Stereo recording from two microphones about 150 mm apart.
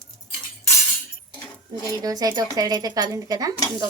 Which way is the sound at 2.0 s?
25° right (ahead or behind).